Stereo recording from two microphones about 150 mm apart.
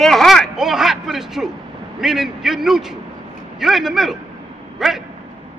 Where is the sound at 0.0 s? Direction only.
Centre (ahead or behind).